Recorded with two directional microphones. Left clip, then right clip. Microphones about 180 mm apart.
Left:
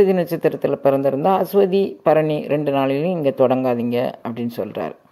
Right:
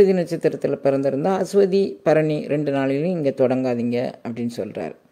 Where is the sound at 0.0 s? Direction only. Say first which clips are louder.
Left 1 dB; 15° right (ahead or behind).